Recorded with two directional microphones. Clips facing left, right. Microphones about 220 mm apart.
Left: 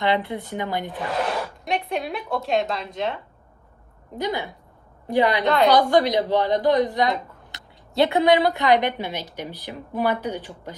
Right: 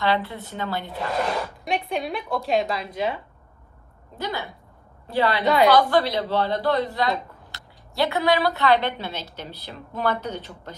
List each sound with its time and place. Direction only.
0.0 s a woman's voice: 20° left (ahead or behind)
1.2 s speech: centre (ahead or behind)
4.2 s a woman's voice: 20° left (ahead or behind)